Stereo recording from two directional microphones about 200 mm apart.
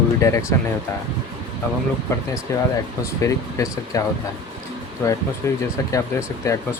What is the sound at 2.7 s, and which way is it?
Speech, 15° left (ahead or behind).